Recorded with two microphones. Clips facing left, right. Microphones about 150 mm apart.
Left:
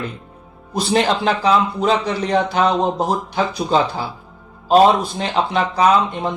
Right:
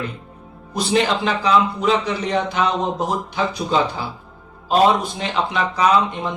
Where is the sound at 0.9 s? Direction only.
40° left (ahead or behind).